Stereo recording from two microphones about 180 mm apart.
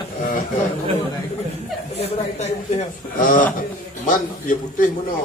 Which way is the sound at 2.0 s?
40° left (ahead or behind).